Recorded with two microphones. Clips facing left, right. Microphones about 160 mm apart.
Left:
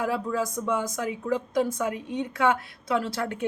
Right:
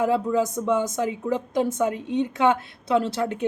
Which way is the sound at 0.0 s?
20° right (ahead or behind).